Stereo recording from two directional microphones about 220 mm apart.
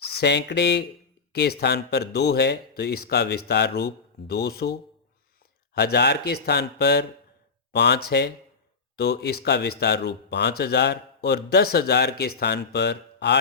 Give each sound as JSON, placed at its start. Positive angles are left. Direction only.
{"t": 0.2, "sound": "speech", "side_deg": 50}